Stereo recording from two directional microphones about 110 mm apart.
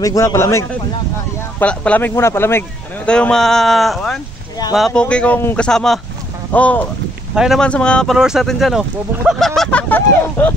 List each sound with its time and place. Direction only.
0.0 s speech: 30° left (ahead or behind)
1.6 s speech: 10° left (ahead or behind)
3.1 s speech: 10° left (ahead or behind)
5.0 s speech: 10° left (ahead or behind)
7.3 s speech: 5° right (ahead or behind)
7.6 s speech: 10° left (ahead or behind)
8.2 s speech: 5° right (ahead or behind)
9.6 s speech: 10° left (ahead or behind)